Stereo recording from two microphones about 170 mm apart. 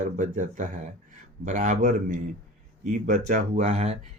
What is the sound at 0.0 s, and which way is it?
Speech, 50° right (ahead or behind).